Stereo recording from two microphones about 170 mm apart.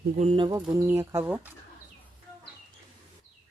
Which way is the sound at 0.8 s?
15° right (ahead or behind).